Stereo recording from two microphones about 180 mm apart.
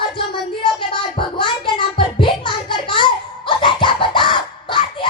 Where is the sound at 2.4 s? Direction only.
25° left (ahead or behind).